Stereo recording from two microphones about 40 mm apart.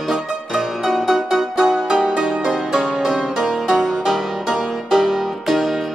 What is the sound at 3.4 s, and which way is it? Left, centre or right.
Music, centre.